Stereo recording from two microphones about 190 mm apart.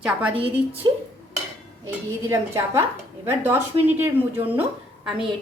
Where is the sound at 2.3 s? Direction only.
15° right (ahead or behind).